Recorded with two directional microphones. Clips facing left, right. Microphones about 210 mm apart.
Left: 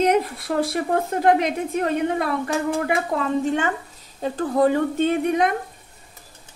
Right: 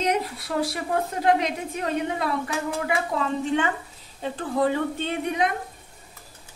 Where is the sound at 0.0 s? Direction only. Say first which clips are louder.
Left 6 dB; 50° left (ahead or behind).